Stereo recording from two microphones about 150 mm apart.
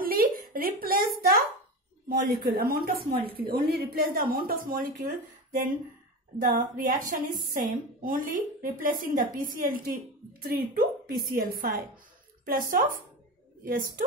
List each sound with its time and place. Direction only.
0.0 s a sound: 70° right (ahead or behind)
2.4 s a woman's voice: 85° right
10.4 s a woman's voice: 90° right; by 14.0 s 65° right (ahead or behind)